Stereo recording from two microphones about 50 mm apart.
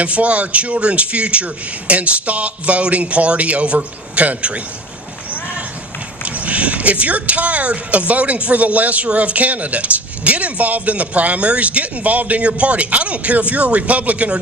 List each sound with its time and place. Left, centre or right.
0.0 s speech: right
6.2 s speech: right